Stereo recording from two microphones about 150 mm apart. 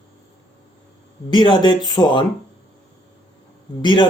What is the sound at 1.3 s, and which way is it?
Speech, 30° left (ahead or behind).